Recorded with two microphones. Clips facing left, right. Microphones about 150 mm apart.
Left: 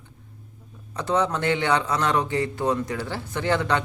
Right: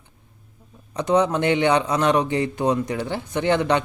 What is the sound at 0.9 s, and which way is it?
A man's voice, 15° right (ahead or behind).